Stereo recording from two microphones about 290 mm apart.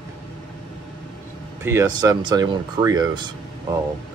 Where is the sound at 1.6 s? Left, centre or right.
Centre.